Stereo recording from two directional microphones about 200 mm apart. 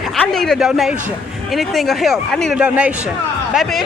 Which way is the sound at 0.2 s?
Centre (ahead or behind).